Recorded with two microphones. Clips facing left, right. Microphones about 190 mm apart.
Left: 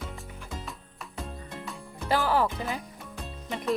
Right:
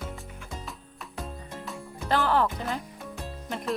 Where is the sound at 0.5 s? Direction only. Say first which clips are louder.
Left 1 dB; centre (ahead or behind).